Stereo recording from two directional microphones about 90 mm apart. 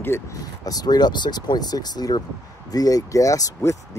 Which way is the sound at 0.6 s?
45° left (ahead or behind).